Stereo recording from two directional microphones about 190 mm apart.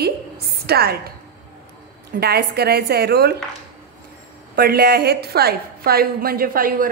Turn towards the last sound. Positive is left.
turn(degrees=-50)  # may be behind; listen again after turning